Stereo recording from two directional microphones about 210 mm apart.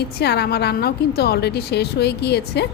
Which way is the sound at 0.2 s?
50° left (ahead or behind).